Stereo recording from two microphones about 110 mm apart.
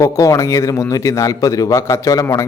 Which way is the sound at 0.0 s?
30° left (ahead or behind).